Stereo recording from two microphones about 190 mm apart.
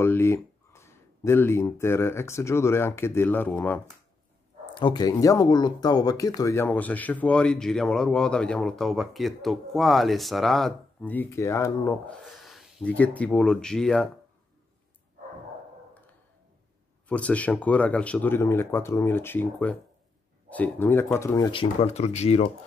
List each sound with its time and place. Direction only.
0.0 s speech: 15° left (ahead or behind)
4.7 s speech: 25° left (ahead or behind)
12.4 s speech: centre (ahead or behind)
17.1 s speech: 5° left (ahead or behind); by 22.5 s 35° left (ahead or behind)